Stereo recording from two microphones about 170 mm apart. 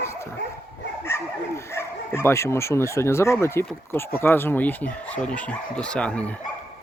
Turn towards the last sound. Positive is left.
turn(degrees=5)  # may be behind; listen again after turning